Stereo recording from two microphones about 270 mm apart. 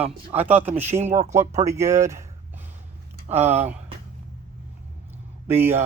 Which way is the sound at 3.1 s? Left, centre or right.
Right.